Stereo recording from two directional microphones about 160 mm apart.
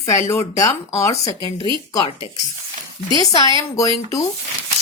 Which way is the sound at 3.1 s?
25° left (ahead or behind).